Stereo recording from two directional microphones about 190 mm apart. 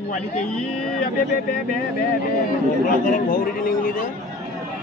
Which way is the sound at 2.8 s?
45° left (ahead or behind).